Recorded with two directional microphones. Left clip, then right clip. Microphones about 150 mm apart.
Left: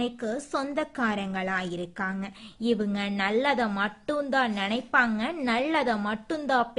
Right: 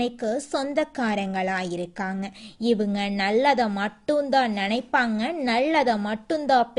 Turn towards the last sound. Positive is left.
turn(degrees=-20)  # may be behind; listen again after turning